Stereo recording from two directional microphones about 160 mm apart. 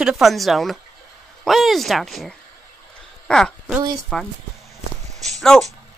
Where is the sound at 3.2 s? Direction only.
5° left (ahead or behind).